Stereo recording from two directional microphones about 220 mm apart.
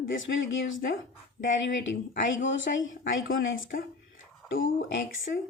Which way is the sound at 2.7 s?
40° left (ahead or behind).